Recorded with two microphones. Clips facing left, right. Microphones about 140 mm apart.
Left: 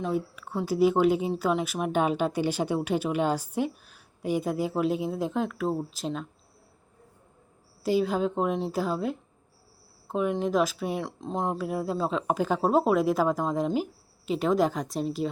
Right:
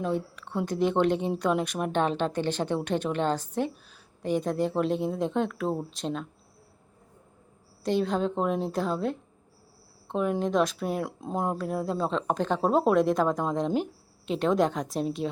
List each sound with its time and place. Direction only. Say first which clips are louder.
0.0 s speech: even; 5° left (ahead or behind)
7.9 s speech: left 1 dB; 5° left (ahead or behind)